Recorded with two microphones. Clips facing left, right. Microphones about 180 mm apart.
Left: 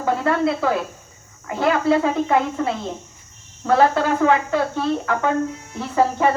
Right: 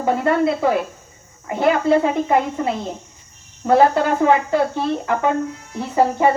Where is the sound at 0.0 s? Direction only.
20° right (ahead or behind).